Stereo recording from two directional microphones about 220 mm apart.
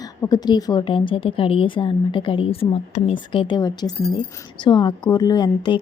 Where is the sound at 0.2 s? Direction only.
15° left (ahead or behind).